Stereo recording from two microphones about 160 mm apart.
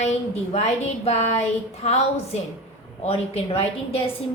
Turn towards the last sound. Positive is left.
turn(degrees=40)  # may be behind; listen again after turning